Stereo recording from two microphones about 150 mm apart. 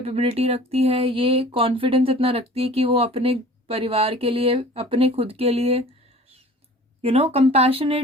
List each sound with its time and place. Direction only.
0.0 s speech: 40° right (ahead or behind)
7.0 s speech: 40° right (ahead or behind)